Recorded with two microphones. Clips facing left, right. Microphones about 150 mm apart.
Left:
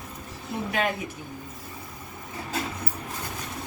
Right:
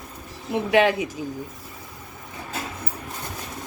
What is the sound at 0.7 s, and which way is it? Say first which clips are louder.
Speech: right 10 dB; 85° right.